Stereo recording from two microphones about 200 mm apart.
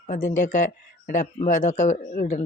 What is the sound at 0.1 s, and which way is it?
A man's voice, 40° left (ahead or behind).